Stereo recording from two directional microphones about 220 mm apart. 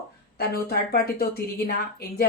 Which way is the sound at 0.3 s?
45° left (ahead or behind).